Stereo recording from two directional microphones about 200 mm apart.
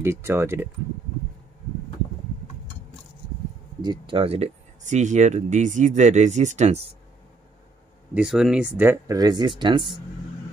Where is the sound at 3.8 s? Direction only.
25° right (ahead or behind).